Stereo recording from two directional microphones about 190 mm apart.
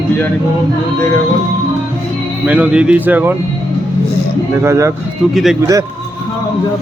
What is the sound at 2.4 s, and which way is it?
Speech, 5° right (ahead or behind).